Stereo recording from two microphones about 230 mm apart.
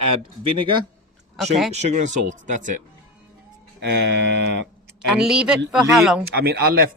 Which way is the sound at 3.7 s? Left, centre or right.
Right.